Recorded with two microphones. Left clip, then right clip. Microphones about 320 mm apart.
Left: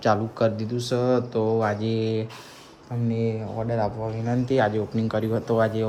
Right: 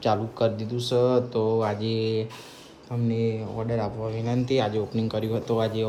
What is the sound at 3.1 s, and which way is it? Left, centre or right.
Speech, centre.